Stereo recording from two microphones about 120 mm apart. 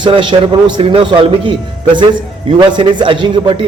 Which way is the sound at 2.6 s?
40° right (ahead or behind).